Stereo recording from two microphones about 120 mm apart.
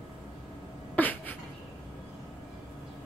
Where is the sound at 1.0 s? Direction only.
15° left (ahead or behind).